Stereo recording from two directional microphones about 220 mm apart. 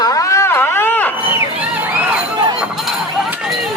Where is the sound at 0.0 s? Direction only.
15° left (ahead or behind).